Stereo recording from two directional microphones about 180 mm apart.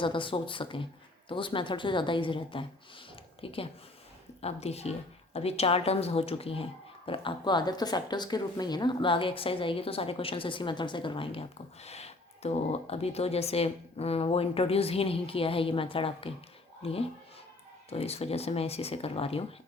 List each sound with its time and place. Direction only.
0.0 s a woman's voice: 30° left (ahead or behind)